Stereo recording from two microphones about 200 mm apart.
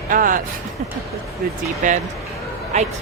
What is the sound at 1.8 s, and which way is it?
Speech, 40° right (ahead or behind).